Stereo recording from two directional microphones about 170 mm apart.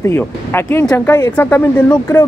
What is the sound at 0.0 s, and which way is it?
Speech, 15° left (ahead or behind).